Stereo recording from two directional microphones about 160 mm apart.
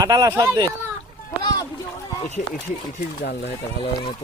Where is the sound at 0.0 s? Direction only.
20° right (ahead or behind).